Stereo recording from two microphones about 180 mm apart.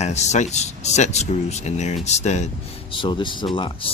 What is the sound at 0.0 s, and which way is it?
Speech, 40° left (ahead or behind).